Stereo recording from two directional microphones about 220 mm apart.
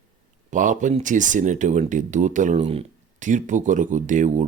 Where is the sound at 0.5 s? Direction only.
35° right (ahead or behind).